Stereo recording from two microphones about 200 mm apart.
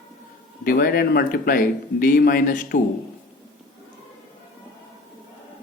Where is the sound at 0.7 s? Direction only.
50° left (ahead or behind).